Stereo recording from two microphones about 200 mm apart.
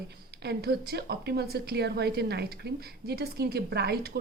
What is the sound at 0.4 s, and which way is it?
A woman's voice, 55° right (ahead or behind).